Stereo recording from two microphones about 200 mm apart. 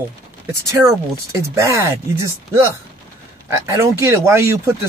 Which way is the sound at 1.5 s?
15° right (ahead or behind).